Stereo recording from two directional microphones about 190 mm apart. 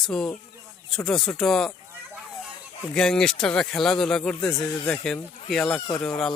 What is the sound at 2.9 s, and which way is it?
Speech, 5° left (ahead or behind).